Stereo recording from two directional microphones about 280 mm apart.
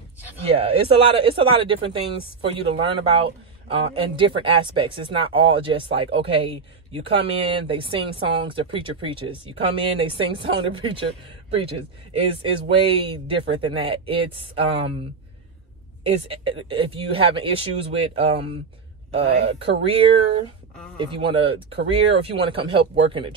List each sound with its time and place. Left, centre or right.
0.5 s speech: right
12.1 s speech: centre
16.1 s speech: centre
19.8 s speech: centre